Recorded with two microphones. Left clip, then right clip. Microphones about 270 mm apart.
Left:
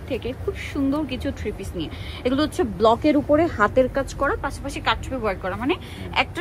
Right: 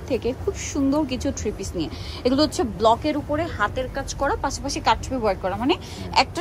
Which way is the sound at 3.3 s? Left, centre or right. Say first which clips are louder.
Left 5 dB; centre.